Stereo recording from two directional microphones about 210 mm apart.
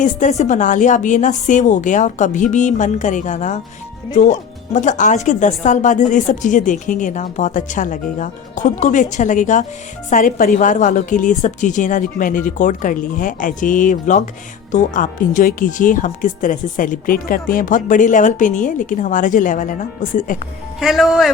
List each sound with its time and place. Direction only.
0.0 s speech: 35° left (ahead or behind)
20.7 s a man's voice: centre (ahead or behind)